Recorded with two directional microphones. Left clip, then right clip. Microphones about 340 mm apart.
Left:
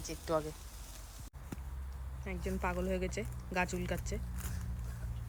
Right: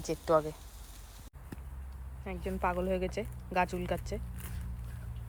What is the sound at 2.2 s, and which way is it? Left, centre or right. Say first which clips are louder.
Speech: right 4 dB; centre.